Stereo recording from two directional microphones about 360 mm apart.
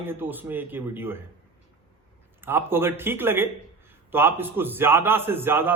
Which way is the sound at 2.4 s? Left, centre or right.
Centre.